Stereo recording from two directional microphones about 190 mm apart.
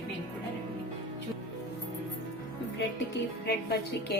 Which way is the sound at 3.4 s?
60° left (ahead or behind).